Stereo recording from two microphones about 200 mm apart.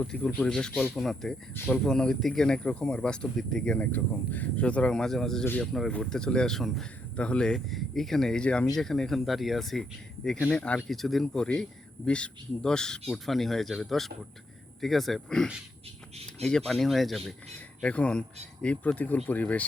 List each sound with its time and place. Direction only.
0.0 s speech: 5° left (ahead or behind)